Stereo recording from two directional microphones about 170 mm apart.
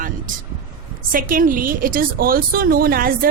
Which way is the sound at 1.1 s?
55° right (ahead or behind).